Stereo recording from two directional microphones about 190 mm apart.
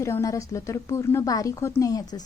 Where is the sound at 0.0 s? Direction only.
15° left (ahead or behind).